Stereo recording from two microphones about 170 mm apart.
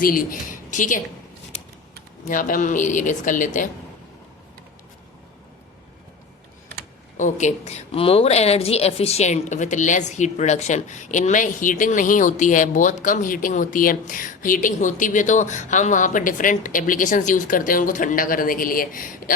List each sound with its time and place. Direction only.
0.0 s speech: 55° left (ahead or behind)
2.3 s a woman's voice: 50° left (ahead or behind)
7.2 s a woman's voice: 45° left (ahead or behind)